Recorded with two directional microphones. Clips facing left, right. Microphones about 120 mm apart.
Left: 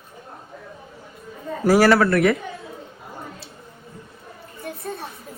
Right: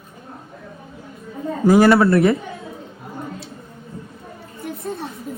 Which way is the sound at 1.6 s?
20° right (ahead or behind).